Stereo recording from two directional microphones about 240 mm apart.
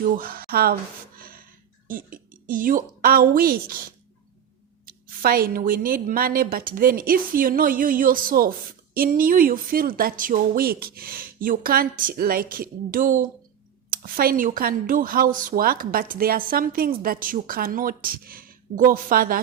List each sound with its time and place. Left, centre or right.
0.2 s a woman's voice: right
1.9 s a woman's voice: right
4.9 s a woman's voice: right